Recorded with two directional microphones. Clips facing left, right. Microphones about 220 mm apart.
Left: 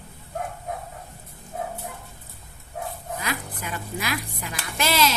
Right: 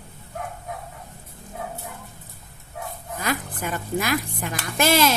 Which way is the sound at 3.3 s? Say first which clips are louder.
Right 7 dB; 45° right (ahead or behind).